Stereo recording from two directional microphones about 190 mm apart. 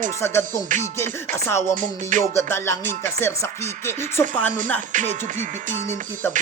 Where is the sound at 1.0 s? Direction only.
15° left (ahead or behind).